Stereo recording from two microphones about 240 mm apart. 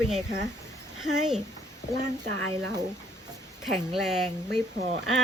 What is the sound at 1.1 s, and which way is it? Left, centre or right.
Speech, right.